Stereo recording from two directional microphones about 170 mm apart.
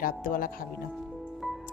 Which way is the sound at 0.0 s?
55° left (ahead or behind).